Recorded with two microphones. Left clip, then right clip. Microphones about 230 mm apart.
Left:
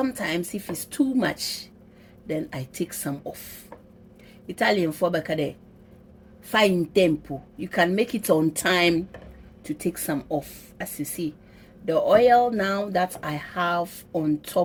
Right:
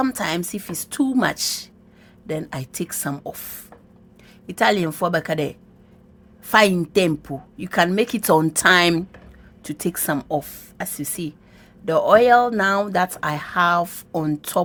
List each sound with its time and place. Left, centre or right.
0.0 s speech: right